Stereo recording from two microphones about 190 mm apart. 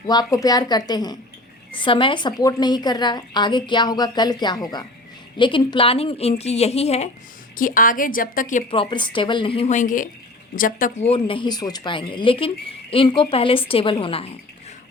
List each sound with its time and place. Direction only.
0.1 s a woman's voice: 20° left (ahead or behind)
7.5 s a woman's voice: 45° left (ahead or behind)
8.7 s a woman's voice: 25° left (ahead or behind); by 11.0 s 45° left (ahead or behind)
11.0 s a woman's voice: 30° left (ahead or behind)